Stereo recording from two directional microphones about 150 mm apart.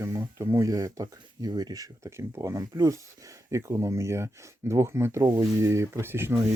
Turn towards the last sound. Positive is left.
turn(degrees=-15)  # may be behind; listen again after turning